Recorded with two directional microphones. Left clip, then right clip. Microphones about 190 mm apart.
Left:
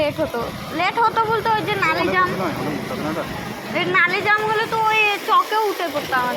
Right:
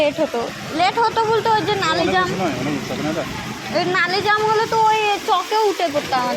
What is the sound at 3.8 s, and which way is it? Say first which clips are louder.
Speech: left 1 dB; centre (ahead or behind).